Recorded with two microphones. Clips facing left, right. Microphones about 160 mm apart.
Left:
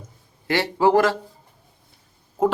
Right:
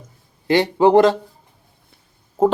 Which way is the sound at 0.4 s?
20° right (ahead or behind).